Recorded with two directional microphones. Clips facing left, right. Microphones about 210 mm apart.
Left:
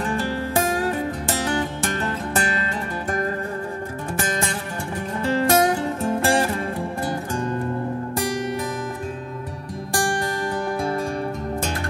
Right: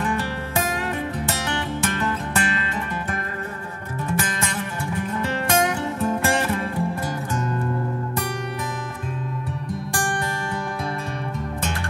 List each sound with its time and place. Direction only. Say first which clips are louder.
1.4 s music: left 2 dB; 35° left (ahead or behind)
4.2 s music: left 1 dB; 35° left (ahead or behind)